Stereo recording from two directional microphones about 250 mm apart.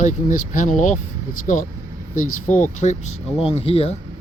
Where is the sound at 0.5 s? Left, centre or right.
Left.